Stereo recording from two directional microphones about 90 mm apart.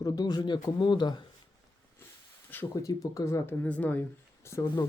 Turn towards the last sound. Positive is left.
turn(degrees=30)  # may be behind; listen again after turning